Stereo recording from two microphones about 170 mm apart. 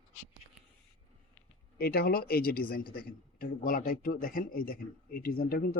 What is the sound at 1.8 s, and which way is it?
A man's voice, 65° left (ahead or behind).